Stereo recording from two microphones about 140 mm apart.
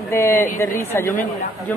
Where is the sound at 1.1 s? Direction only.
70° left (ahead or behind).